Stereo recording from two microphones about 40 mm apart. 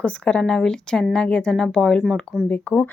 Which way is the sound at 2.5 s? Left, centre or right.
Left.